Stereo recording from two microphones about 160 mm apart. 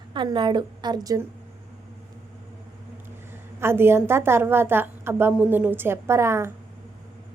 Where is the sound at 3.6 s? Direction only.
15° right (ahead or behind).